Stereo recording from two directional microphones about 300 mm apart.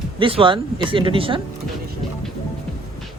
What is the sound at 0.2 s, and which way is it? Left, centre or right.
Speech, centre.